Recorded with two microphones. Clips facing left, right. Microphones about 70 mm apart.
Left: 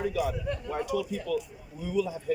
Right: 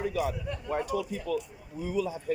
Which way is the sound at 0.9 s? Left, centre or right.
Right.